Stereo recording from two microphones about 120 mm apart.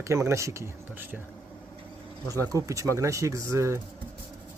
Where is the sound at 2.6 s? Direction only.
25° right (ahead or behind).